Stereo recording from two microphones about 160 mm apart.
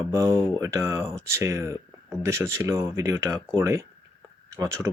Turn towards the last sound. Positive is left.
turn(degrees=-15)  # may be behind; listen again after turning